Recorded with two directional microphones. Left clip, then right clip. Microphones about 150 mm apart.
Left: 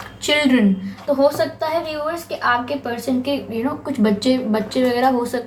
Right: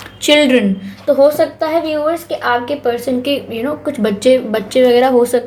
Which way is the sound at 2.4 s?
35° right (ahead or behind).